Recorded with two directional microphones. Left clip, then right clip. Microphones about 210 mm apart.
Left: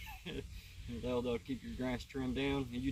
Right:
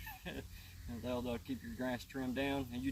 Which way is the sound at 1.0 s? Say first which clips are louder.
Left 4 dB; 15° right (ahead or behind).